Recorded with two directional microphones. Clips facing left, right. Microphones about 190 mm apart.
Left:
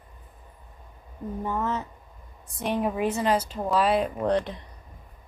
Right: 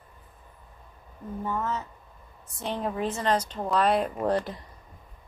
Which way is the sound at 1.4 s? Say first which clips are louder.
Left 2 dB; 15° left (ahead or behind).